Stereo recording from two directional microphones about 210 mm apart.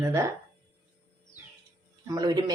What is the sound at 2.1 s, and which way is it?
Speech, 20° right (ahead or behind).